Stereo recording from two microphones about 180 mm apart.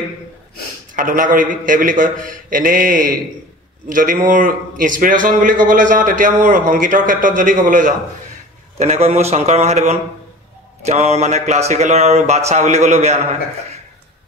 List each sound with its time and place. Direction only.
0.9 s a man's voice: 50° right (ahead or behind)